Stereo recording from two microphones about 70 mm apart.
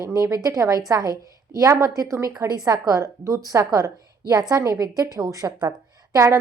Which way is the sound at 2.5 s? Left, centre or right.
Right.